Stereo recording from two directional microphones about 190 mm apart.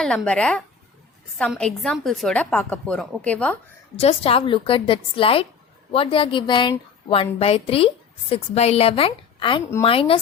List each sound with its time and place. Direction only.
0.0 s a woman's voice: 5° left (ahead or behind)
3.9 s a woman's voice: 30° left (ahead or behind)